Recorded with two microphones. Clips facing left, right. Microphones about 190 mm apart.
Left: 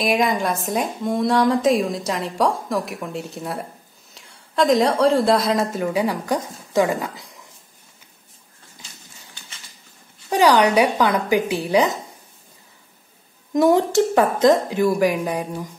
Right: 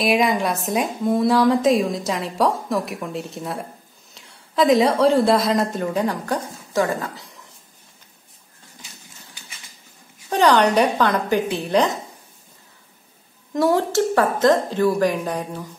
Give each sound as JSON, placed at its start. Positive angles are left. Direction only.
{"t": 0.0, "sound": "a woman's voice", "side_deg": 0}
{"t": 10.3, "sound": "speech", "side_deg": 10}
{"t": 13.5, "sound": "speech", "side_deg": 20}